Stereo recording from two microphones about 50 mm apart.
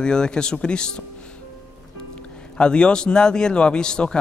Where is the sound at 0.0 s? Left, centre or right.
Centre.